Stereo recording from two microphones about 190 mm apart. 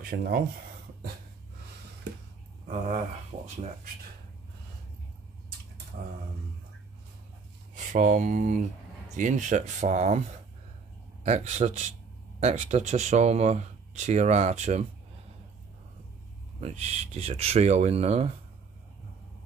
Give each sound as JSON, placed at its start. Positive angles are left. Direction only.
{"t": 0.0, "sound": "speech", "side_deg": -50}
{"t": 5.9, "sound": "a sound", "side_deg": -50}
{"t": 7.7, "sound": "speech", "side_deg": -40}
{"t": 11.2, "sound": "speech", "side_deg": -35}
{"t": 16.6, "sound": "speech", "side_deg": -35}